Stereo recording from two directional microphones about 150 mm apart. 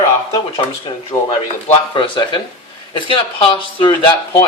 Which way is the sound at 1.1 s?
25° left (ahead or behind).